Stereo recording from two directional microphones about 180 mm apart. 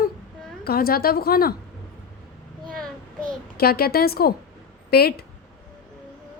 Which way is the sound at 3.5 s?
60° left (ahead or behind).